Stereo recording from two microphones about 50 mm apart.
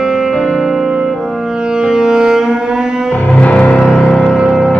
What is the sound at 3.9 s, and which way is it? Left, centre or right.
Music, centre.